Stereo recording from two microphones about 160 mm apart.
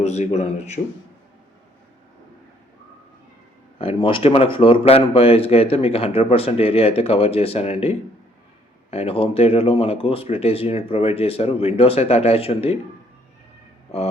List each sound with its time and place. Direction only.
0.0 s speech: 45° left (ahead or behind)
3.8 s speech: 35° left (ahead or behind)